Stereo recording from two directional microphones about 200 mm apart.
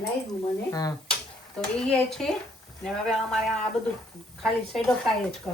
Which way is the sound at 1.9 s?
5° left (ahead or behind).